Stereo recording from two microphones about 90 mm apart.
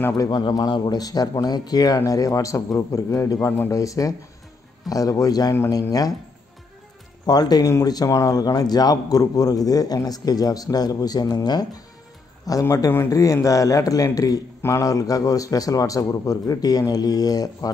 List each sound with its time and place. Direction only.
0.2 s a man's voice: 45° left (ahead or behind)
7.2 s speech: 50° left (ahead or behind)
12.4 s a man's voice: 35° left (ahead or behind)